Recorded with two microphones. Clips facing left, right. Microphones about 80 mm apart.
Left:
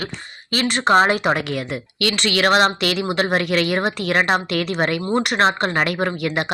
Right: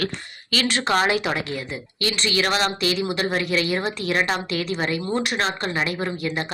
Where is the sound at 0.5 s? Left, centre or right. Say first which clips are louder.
Left 5 dB; left.